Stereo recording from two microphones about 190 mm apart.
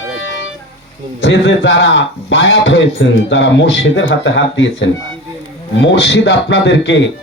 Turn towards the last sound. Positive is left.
turn(degrees=65)  # may be behind; listen again after turning